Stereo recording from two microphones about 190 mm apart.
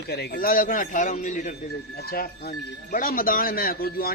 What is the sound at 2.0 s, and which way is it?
A man's voice, 55° left (ahead or behind).